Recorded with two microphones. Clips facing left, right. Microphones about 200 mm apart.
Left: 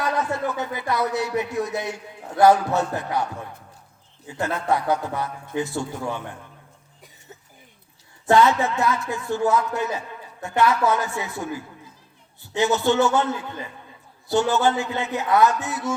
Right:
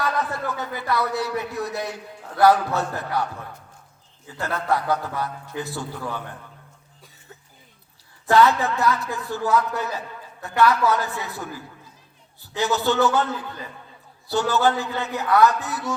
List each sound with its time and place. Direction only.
0.0 s a man's voice: 20° left (ahead or behind)
4.3 s a man's voice: 20° left (ahead or behind)
8.3 s a man's voice: 20° left (ahead or behind)
12.5 s a man's voice: 20° left (ahead or behind)